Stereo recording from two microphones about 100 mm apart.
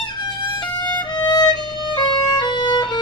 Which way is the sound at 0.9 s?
45° left (ahead or behind).